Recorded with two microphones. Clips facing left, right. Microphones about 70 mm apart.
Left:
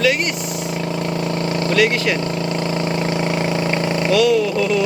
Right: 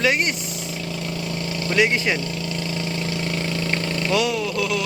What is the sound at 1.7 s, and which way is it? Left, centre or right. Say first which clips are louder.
Speech: left 2 dB; centre.